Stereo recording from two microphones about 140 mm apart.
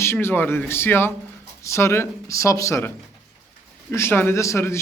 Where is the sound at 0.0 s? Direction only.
15° left (ahead or behind).